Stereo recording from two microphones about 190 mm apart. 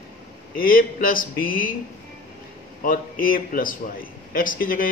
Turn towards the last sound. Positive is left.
turn(degrees=45)  # may be behind; listen again after turning